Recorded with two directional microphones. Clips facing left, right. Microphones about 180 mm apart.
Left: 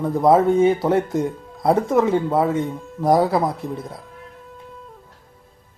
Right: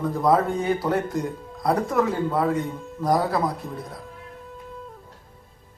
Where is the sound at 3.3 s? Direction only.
25° left (ahead or behind).